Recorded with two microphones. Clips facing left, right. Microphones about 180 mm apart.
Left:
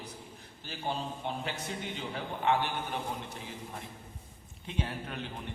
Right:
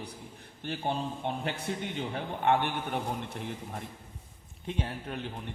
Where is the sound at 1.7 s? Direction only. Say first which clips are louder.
Right 4 dB; 55° right (ahead or behind).